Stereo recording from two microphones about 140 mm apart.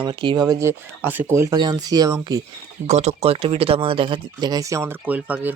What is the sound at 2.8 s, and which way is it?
Speech, 50° right (ahead or behind).